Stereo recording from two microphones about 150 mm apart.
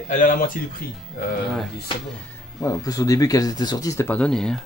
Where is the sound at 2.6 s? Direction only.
25° left (ahead or behind).